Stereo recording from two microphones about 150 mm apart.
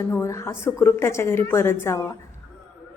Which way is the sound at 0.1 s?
20° left (ahead or behind).